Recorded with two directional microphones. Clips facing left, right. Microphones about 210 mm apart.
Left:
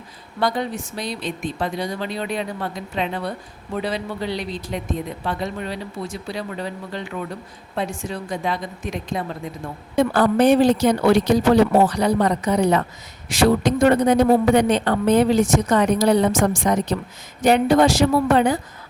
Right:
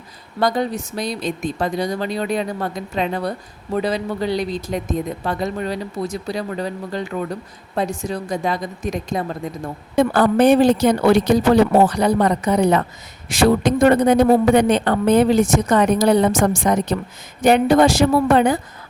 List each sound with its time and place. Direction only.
0.3 s a man's voice: 40° right (ahead or behind)